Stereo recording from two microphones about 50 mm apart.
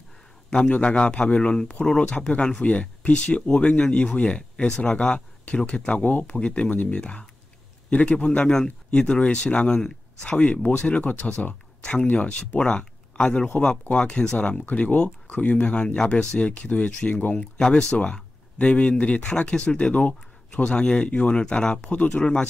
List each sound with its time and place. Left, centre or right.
0.7 s speech: left
14.7 s speech: left
17.3 s speech: centre